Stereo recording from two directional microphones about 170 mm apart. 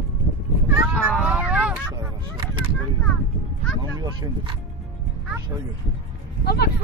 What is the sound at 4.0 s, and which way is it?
Speech, 25° right (ahead or behind).